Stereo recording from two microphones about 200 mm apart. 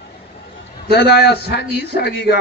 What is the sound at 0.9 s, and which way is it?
Speech, 55° left (ahead or behind).